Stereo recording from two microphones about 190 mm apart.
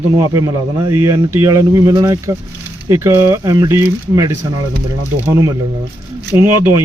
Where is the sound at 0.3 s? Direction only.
15° right (ahead or behind).